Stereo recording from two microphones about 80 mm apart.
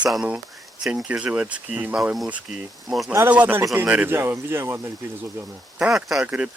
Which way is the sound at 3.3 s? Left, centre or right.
Centre.